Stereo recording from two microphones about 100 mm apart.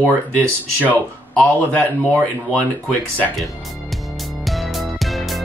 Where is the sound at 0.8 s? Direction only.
15° left (ahead or behind).